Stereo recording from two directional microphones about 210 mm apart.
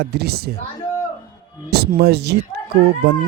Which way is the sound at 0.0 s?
50° right (ahead or behind).